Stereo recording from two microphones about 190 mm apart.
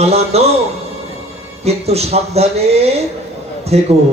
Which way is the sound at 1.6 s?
35° right (ahead or behind).